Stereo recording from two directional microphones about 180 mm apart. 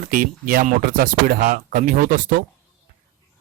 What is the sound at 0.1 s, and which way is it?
A man's voice, 50° right (ahead or behind).